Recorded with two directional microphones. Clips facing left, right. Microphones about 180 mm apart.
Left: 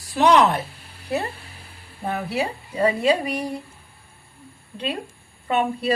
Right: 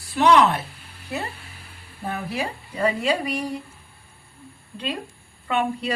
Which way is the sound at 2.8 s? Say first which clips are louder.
Left 3 dB; 10° left (ahead or behind).